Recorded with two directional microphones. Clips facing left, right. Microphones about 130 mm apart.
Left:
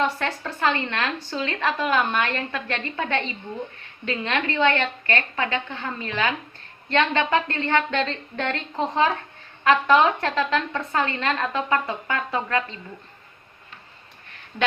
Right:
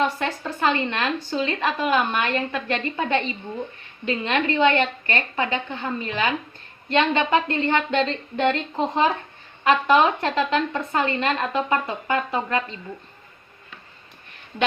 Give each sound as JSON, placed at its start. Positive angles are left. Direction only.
{"t": 0.0, "sound": "a woman's voice", "side_deg": -10}
{"t": 9.6, "sound": "a woman's voice", "side_deg": -15}